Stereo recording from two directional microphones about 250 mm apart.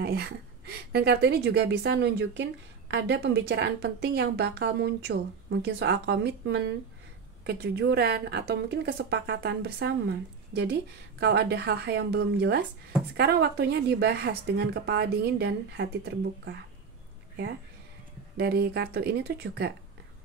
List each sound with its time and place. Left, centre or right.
0.0 s a woman's voice: right
18.4 s a woman's voice: right